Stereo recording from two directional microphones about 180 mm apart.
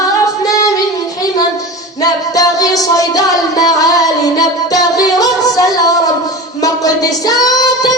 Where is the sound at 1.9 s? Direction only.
20° left (ahead or behind).